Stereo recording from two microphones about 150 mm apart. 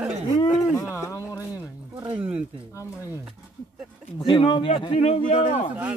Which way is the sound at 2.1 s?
10° right (ahead or behind).